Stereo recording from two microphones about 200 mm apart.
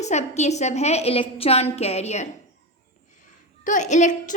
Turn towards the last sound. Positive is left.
turn(degrees=40)  # may be behind; listen again after turning